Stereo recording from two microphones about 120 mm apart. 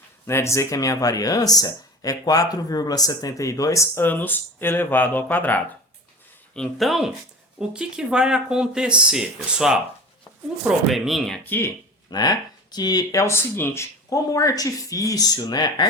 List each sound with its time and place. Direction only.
0.3 s speech: 20° left (ahead or behind)
6.5 s speech: 5° left (ahead or behind)
11.4 s speech: 15° left (ahead or behind)
12.1 s speech: 35° left (ahead or behind)